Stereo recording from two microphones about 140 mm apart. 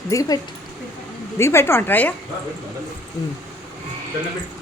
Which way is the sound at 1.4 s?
20° left (ahead or behind).